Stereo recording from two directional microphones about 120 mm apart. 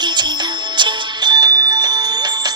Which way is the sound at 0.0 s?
40° right (ahead or behind).